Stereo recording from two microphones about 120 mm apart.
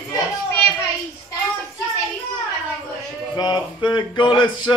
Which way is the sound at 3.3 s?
35° left (ahead or behind).